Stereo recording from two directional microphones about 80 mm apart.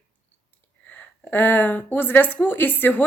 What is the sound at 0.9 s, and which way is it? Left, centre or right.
A woman's voice, centre.